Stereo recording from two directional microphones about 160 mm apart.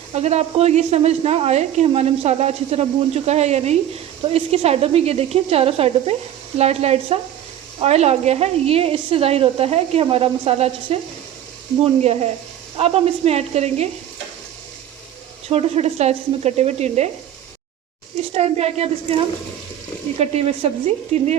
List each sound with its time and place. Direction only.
0.1 s a woman's voice: 45° right (ahead or behind)
12.7 s a woman's voice: 40° right (ahead or behind)
15.4 s a woman's voice: 40° right (ahead or behind)
18.3 s a woman's voice: 40° right (ahead or behind)